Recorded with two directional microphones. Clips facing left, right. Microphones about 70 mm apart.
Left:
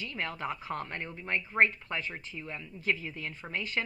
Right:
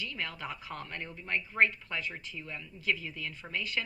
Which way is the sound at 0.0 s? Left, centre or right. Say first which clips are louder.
Left 3 dB; left.